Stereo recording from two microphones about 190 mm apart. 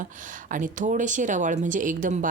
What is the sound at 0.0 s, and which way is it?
Speech, 45° right (ahead or behind).